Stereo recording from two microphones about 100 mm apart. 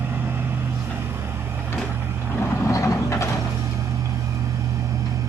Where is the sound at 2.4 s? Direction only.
30° left (ahead or behind).